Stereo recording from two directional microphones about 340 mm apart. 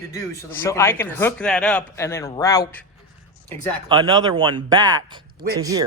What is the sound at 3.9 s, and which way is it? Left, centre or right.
Speech, centre.